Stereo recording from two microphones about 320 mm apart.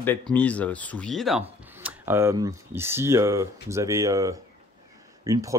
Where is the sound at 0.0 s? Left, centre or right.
Centre.